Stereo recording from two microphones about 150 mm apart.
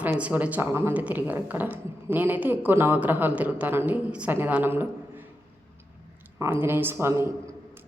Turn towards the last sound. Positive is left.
turn(degrees=-15)  # may be behind; listen again after turning